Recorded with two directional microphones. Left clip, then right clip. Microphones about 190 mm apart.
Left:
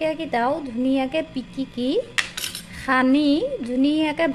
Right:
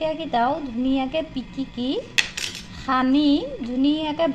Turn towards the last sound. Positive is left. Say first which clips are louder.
# left 1 dB
turn(degrees=30)  # may be behind; listen again after turning